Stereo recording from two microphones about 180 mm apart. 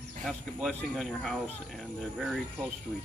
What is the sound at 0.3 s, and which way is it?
Speech, 5° left (ahead or behind).